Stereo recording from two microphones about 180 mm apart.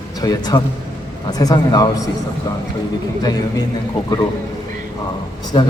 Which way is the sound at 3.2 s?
20° left (ahead or behind).